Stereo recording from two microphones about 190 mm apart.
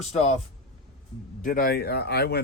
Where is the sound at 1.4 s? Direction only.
50° left (ahead or behind).